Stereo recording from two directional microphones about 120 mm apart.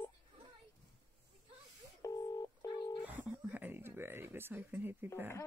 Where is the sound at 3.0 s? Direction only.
15° right (ahead or behind).